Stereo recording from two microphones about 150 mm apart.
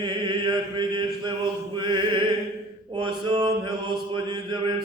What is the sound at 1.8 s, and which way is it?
Music, 30° right (ahead or behind).